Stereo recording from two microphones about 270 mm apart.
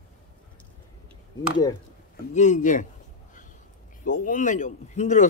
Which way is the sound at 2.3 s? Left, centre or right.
Left.